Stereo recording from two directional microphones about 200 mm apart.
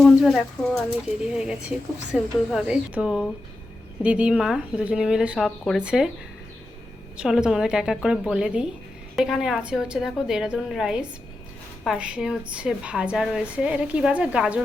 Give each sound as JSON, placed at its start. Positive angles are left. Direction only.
{"t": 0.0, "sound": "a woman's voice", "side_deg": 0}
{"t": 7.2, "sound": "a woman's voice", "side_deg": -5}